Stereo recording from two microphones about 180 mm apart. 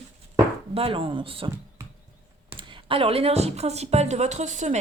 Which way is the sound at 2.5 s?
25° right (ahead or behind).